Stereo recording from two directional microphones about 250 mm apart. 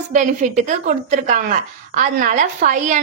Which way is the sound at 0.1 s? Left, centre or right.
Right.